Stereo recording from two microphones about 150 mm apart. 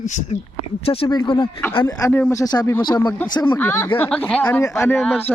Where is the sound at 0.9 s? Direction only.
40° left (ahead or behind).